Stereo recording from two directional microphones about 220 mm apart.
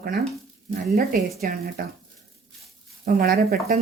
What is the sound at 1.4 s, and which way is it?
Speech, 40° right (ahead or behind).